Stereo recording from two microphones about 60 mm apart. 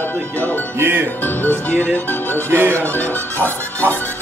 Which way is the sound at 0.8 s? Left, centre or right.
Right.